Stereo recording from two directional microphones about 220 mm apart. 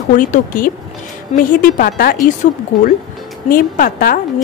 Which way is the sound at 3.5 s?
40° left (ahead or behind).